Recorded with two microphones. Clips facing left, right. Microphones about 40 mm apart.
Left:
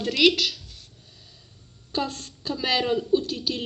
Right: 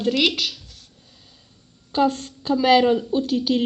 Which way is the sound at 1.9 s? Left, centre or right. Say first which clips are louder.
Right 9 dB; right.